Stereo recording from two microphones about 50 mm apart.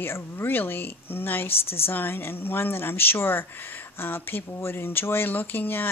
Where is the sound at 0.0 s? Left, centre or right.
Left.